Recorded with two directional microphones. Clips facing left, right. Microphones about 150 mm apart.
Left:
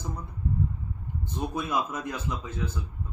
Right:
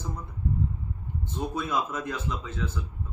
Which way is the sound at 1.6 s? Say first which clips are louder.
Even; 15° left (ahead or behind).